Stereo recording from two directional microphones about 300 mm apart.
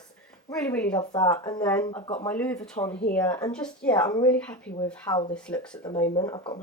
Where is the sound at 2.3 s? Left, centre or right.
Centre.